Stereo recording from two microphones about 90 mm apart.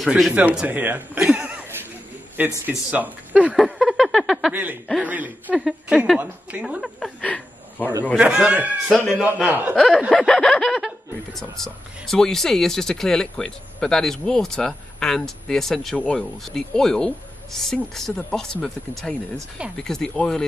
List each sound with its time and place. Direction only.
0.3 s a man's voice: 15° right (ahead or behind)
3.5 s a sound: centre (ahead or behind)
4.5 s speech: 20° right (ahead or behind); by 7.1 s 5° right (ahead or behind)
7.2 s a sound: 10° left (ahead or behind)
8.2 s speech: 10° right (ahead or behind)
8.9 s speech: 5° left (ahead or behind)
9.2 s speech: 15° right (ahead or behind)
9.8 s speech: 5° right (ahead or behind)
10.2 s speech: 5° left (ahead or behind)